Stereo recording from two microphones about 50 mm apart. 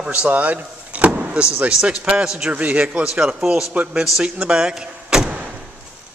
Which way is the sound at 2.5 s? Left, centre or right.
Right.